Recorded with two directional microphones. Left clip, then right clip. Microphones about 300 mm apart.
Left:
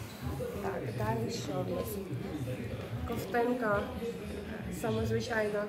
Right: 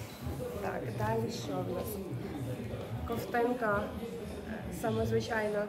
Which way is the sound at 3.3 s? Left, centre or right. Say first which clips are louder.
Even; centre.